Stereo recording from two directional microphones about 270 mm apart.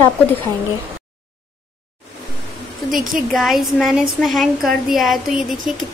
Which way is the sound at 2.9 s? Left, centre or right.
Centre.